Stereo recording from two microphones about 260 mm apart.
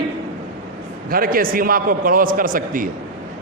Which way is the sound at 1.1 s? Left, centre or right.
Right.